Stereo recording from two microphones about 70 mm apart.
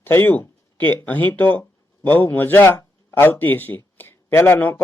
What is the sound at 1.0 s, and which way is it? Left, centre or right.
A man's voice, left.